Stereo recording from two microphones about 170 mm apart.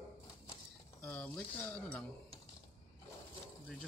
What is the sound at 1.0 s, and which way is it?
Speech, 5° left (ahead or behind).